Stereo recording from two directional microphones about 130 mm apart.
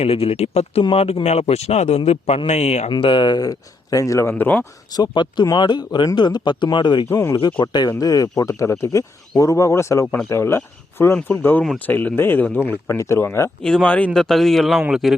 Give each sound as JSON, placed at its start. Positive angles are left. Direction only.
{"t": 0.0, "sound": "a man's voice", "side_deg": 50}
{"t": 2.9, "sound": "speech", "side_deg": 40}
{"t": 4.9, "sound": "speech", "side_deg": 35}
{"t": 7.1, "sound": "speech", "side_deg": 20}
{"t": 7.6, "sound": "speech", "side_deg": 35}
{"t": 13.6, "sound": "a man's voice", "side_deg": 5}